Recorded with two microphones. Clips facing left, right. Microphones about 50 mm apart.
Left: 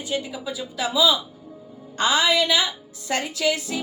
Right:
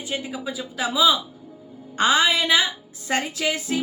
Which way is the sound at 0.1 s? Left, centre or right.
Right.